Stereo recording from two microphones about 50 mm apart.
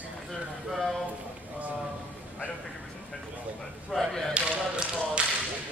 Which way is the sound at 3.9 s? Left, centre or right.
Centre.